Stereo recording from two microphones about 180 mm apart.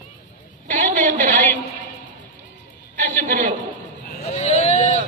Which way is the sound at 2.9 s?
45° right (ahead or behind).